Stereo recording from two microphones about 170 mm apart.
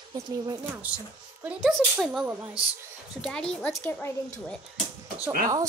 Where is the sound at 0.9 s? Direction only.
5° right (ahead or behind); by 4.5 s 10° left (ahead or behind).